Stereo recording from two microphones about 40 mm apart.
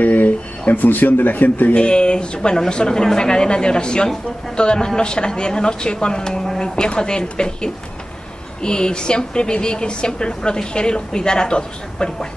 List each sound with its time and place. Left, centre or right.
0.0 s speech: left
1.8 s a woman's voice: left